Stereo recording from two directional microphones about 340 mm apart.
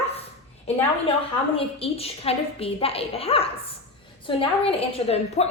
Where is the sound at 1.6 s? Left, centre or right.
Centre.